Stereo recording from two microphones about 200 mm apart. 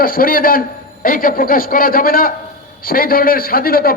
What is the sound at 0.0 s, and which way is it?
A man's voice, 45° left (ahead or behind).